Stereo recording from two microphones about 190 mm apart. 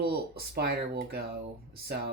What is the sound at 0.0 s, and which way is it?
Speech, 55° right (ahead or behind).